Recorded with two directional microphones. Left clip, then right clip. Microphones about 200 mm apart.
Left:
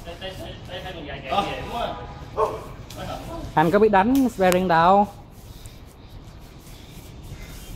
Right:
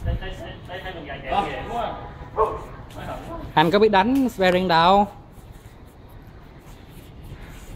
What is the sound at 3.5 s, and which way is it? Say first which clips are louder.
Speech: even; 5° right (ahead or behind).